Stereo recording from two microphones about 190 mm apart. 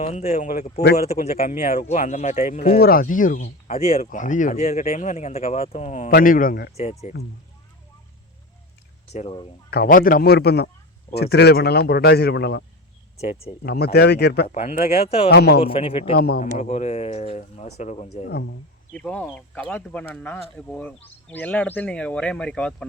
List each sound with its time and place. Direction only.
0.0 s speech: 35° left (ahead or behind); by 0.9 s 55° left (ahead or behind)
1.4 s speech: 40° left (ahead or behind)
2.7 s speech: 50° left (ahead or behind)
3.8 s speech: 30° left (ahead or behind); by 6.7 s 50° left (ahead or behind)
9.1 s a man's voice: 30° left (ahead or behind)
9.6 s speech: 50° left (ahead or behind)
14.5 s speech: 35° left (ahead or behind)
15.3 s speech: 60° left (ahead or behind)
15.6 s a man's voice: 30° left (ahead or behind)
16.1 s speech: 55° left (ahead or behind)
16.4 s speech: 40° left (ahead or behind)
18.3 s speech: 60° left (ahead or behind)
18.9 s speech: 5° left (ahead or behind)